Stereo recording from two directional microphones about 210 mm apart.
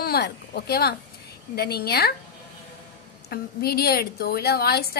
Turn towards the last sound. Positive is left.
turn(degrees=50)  # may be behind; listen again after turning